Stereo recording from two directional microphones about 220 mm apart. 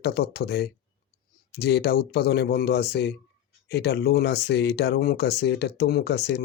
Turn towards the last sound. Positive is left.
turn(degrees=50)  # may be behind; listen again after turning